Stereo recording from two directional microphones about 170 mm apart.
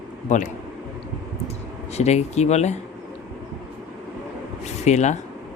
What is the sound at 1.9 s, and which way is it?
Speech, 40° left (ahead or behind).